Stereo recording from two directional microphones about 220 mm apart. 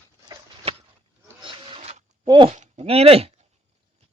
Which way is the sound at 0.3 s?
25° right (ahead or behind).